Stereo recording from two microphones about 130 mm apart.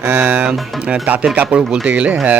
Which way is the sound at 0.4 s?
5° right (ahead or behind).